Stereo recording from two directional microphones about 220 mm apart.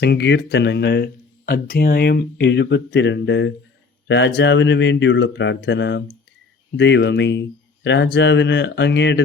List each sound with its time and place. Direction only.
0.0 s speech: 50° left (ahead or behind)